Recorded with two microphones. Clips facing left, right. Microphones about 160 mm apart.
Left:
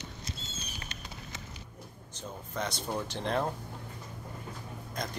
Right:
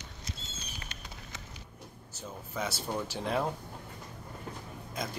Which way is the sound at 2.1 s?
5° right (ahead or behind).